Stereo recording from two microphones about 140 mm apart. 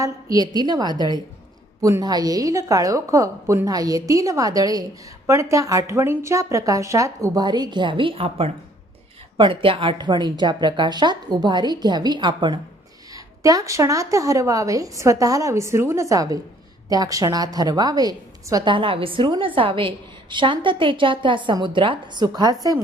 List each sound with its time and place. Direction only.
0.0 s a woman's voice: 25° right (ahead or behind)